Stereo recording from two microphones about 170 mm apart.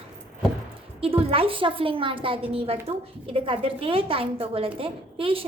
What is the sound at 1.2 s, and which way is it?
A woman's voice, 35° right (ahead or behind).